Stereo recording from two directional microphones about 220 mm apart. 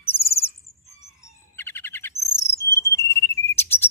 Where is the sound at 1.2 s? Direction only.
10° left (ahead or behind).